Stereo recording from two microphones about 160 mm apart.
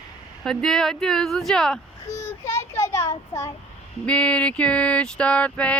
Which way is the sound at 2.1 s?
20° left (ahead or behind).